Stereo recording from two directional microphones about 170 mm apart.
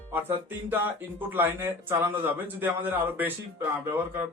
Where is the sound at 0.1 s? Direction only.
10° right (ahead or behind).